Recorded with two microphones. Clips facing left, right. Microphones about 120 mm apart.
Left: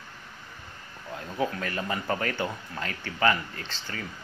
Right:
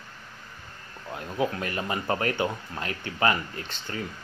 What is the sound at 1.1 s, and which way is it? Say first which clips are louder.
A man's voice: right 2 dB; 20° right (ahead or behind).